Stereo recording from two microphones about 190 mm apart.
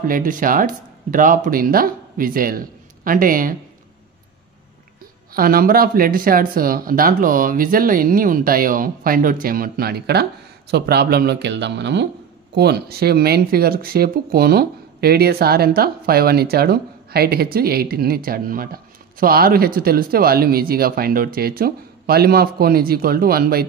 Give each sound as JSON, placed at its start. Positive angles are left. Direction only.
{"t": 0.0, "sound": "speech", "side_deg": -45}
{"t": 5.3, "sound": "speech", "side_deg": -50}